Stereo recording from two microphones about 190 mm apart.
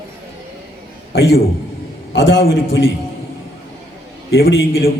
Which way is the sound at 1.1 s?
80° left.